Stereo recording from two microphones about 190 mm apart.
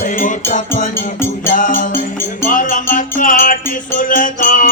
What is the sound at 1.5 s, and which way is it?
Music, 45° left (ahead or behind).